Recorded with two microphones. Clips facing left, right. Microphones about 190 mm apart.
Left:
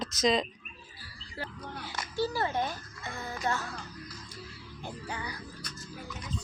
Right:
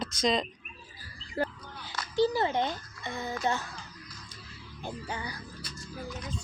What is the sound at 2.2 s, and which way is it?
A child's voice, 20° right (ahead or behind).